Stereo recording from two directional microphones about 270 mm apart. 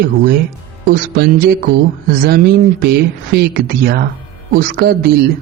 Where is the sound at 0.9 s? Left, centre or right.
Right.